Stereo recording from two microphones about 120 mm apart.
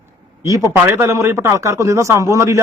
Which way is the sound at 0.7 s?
20° right (ahead or behind).